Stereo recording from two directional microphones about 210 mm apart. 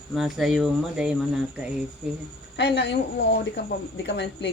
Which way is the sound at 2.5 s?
55° left (ahead or behind).